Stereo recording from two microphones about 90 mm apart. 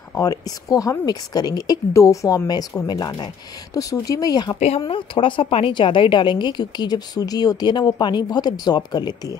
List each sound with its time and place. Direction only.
0.1 s a woman's voice: 40° left (ahead or behind)
4.7 s a woman's voice: 75° left (ahead or behind); by 9.4 s 50° left (ahead or behind)